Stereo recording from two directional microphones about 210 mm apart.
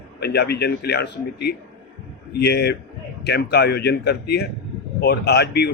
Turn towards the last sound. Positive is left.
turn(degrees=50)  # may be behind; listen again after turning